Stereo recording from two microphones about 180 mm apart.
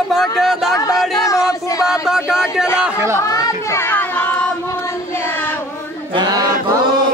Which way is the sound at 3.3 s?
15° left (ahead or behind).